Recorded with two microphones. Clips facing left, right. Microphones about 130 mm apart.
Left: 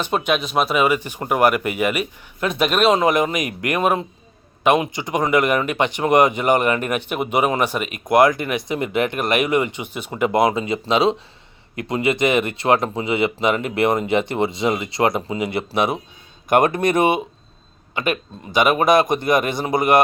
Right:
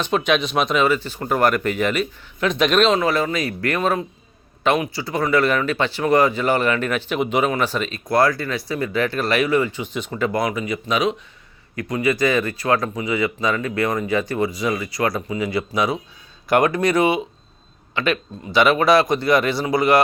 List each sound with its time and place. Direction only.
0.0 s speech: 10° left (ahead or behind)
18.5 s speech: 15° left (ahead or behind)